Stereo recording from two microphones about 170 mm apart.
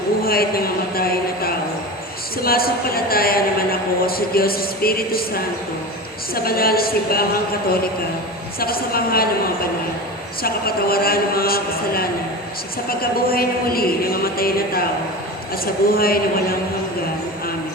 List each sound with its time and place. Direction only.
0.3 s a sound: 60° left (ahead or behind)
2.4 s a woman's voice: 60° left (ahead or behind)
6.3 s a woman's voice: 60° left (ahead or behind)
8.5 s a woman's voice: 60° left (ahead or behind)
10.4 s a woman's voice: 60° left (ahead or behind)